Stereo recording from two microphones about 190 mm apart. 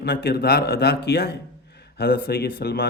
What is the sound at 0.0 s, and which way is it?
A man's voice, 55° left (ahead or behind).